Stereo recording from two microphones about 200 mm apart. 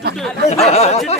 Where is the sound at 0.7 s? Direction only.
35° left (ahead or behind).